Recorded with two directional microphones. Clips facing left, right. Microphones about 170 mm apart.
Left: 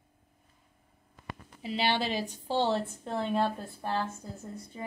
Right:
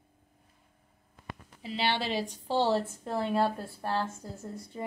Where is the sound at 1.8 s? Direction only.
30° right (ahead or behind).